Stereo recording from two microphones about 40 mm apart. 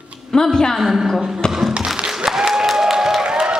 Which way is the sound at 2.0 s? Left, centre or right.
Centre.